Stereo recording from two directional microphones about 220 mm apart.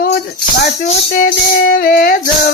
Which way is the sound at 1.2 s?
40° left (ahead or behind).